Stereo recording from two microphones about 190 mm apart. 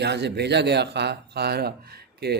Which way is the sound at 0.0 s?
60° right (ahead or behind).